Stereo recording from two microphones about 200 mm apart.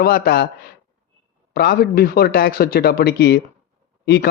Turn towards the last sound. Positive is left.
turn(degrees=55)  # may be behind; listen again after turning